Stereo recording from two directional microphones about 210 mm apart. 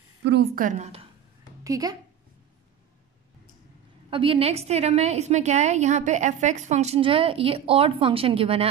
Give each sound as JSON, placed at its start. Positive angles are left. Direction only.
{"t": 0.2, "sound": "a woman's voice", "side_deg": -55}
{"t": 0.7, "sound": "a woman's voice", "side_deg": -35}
{"t": 1.6, "sound": "speech", "side_deg": -15}
{"t": 4.1, "sound": "a woman's voice", "side_deg": -25}